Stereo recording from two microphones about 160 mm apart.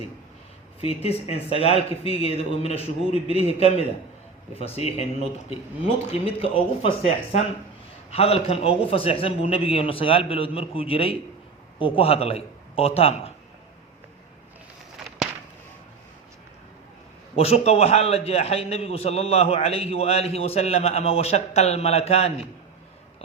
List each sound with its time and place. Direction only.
1.0 s a man's voice: 40° left (ahead or behind)
17.3 s a man's voice: 40° left (ahead or behind)